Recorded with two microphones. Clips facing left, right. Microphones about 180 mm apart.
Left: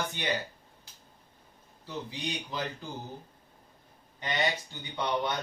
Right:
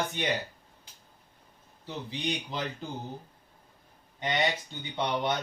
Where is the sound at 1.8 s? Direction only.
20° right (ahead or behind).